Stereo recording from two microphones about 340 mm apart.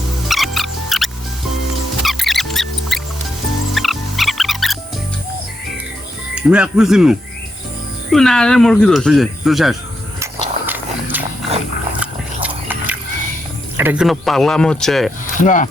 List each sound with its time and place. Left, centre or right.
0.3 s music: centre
6.3 s speech: centre
10.7 s a sound: centre
13.7 s speech: centre
15.4 s chopping: left